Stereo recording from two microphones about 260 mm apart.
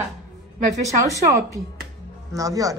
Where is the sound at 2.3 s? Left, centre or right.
Centre.